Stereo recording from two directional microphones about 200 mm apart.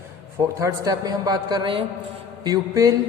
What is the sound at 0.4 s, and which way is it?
A man's voice, 15° right (ahead or behind).